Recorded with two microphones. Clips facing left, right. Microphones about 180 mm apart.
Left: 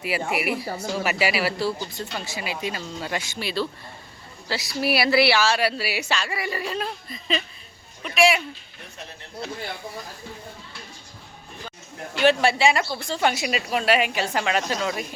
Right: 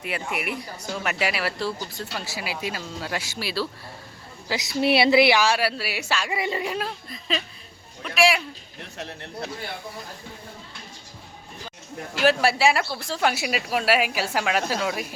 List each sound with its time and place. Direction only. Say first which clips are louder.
0.3 s speech: left 4 dB; 5° left (ahead or behind)
4.4 s speech: right 3 dB; 20° right (ahead or behind)
5.5 s speech: left 2 dB; centre (ahead or behind)
6.2 s speech: right 2 dB; 20° right (ahead or behind)
6.7 s speech: even; centre (ahead or behind)
9.0 s speech: right 6 dB; 65° right (ahead or behind)
12.1 s speech: left 1 dB; 5° right (ahead or behind)